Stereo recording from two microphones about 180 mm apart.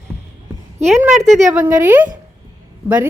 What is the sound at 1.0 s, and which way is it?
A woman's voice, centre (ahead or behind).